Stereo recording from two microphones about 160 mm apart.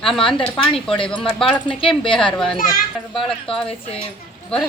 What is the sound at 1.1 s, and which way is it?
Speech, 35° left (ahead or behind).